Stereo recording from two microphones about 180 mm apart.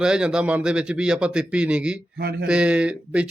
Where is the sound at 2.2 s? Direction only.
60° right (ahead or behind).